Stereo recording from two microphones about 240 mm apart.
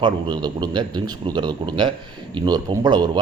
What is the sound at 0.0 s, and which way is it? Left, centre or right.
A man's voice, centre.